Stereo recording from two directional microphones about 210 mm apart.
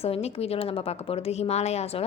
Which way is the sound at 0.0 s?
30° left (ahead or behind).